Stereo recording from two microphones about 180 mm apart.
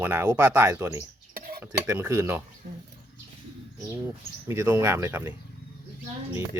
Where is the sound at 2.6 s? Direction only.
55° right (ahead or behind).